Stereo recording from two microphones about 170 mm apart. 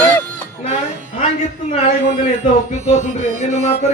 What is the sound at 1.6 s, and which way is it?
Speech, 40° left (ahead or behind).